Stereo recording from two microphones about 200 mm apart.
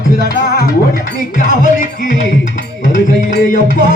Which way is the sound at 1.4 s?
40° left (ahead or behind).